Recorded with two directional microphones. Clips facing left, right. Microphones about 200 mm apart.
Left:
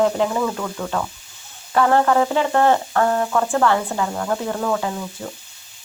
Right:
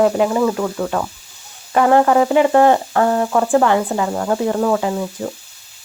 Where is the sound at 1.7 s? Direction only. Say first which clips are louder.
Right 3 dB; 15° right (ahead or behind).